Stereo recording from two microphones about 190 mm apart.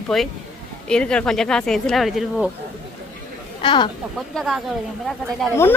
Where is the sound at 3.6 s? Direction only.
25° left (ahead or behind).